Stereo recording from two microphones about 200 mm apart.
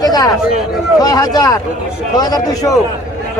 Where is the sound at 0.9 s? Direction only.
20° left (ahead or behind).